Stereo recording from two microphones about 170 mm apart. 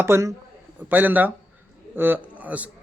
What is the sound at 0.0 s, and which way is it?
A man's voice, 15° right (ahead or behind).